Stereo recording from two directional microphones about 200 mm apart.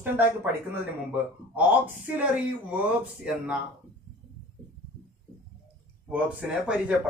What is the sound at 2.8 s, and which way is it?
Speech, 5° right (ahead or behind).